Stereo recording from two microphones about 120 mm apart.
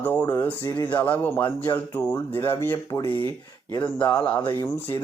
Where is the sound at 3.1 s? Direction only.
45° right (ahead or behind).